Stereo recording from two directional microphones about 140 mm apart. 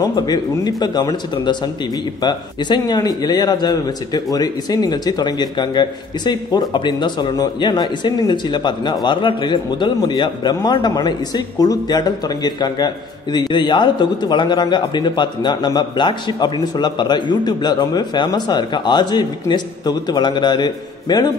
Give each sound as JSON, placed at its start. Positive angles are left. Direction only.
{"t": 0.0, "sound": "a man's voice", "side_deg": 30}